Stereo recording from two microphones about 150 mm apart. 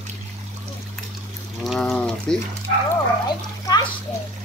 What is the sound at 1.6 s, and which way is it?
Speech, centre (ahead or behind).